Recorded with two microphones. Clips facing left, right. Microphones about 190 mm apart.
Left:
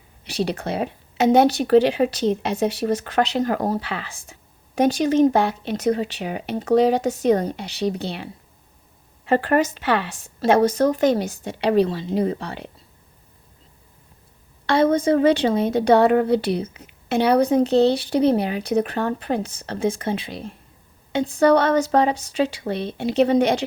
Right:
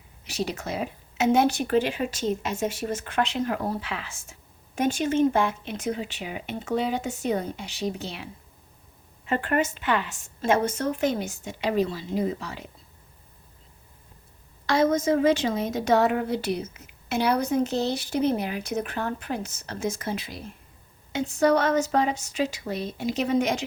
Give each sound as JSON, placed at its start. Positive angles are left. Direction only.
{"t": 0.7, "sound": "speech", "side_deg": 65}
{"t": 1.2, "sound": "a woman's voice", "side_deg": 35}
{"t": 9.3, "sound": "a woman's voice", "side_deg": 35}
{"t": 12.4, "sound": "speech", "side_deg": 65}
{"t": 14.7, "sound": "a woman's voice", "side_deg": 30}